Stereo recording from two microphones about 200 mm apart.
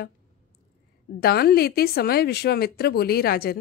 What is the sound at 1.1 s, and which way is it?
Speech, 50° left (ahead or behind).